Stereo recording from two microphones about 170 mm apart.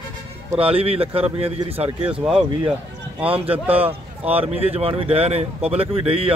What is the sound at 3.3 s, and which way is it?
Speech, 35° right (ahead or behind).